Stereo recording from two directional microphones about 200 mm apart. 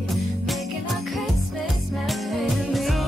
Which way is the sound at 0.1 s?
Centre (ahead or behind).